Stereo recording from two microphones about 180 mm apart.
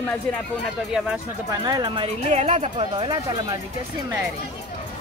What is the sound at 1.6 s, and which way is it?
Speech, 25° right (ahead or behind).